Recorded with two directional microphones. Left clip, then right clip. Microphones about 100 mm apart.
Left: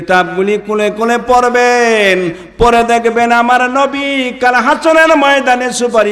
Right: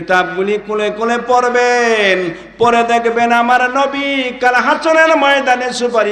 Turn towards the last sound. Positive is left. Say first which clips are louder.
# left 3 dB
turn(degrees=45)  # may be behind; listen again after turning